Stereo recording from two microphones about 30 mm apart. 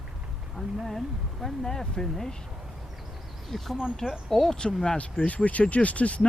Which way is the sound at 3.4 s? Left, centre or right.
Centre.